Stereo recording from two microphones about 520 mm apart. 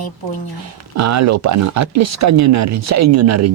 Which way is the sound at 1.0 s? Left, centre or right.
Right.